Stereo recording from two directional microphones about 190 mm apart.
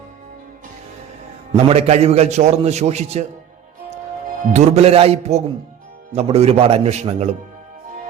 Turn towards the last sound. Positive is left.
turn(degrees=-35)  # may be behind; listen again after turning